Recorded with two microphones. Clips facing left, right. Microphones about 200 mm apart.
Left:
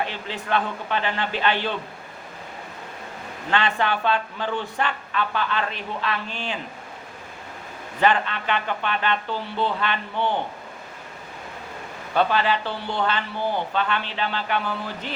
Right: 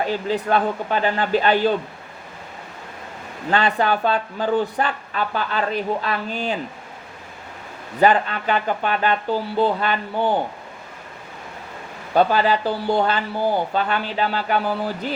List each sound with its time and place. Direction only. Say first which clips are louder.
0.0 s speech: right 8 dB; 40° right (ahead or behind)
3.5 s speech: right 4 dB; 40° right (ahead or behind)
8.0 s speech: right 4 dB; 40° right (ahead or behind)
12.1 s speech: right 4 dB; 40° right (ahead or behind)